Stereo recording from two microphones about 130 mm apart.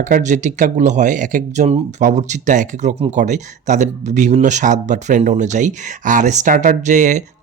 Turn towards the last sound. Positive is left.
turn(degrees=-70)  # may be behind; listen again after turning